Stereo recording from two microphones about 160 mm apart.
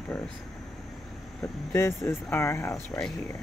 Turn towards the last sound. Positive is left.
turn(degrees=15)  # may be behind; listen again after turning